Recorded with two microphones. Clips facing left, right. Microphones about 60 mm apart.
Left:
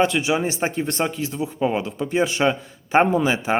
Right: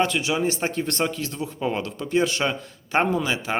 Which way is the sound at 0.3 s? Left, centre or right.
Centre.